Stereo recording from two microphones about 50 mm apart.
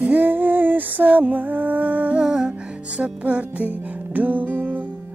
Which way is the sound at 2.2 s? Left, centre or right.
Centre.